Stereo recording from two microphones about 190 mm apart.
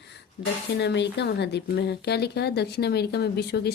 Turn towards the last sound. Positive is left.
turn(degrees=60)  # may be behind; listen again after turning